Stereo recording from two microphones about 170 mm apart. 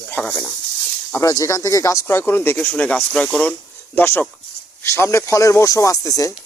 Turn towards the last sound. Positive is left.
turn(degrees=20)  # may be behind; listen again after turning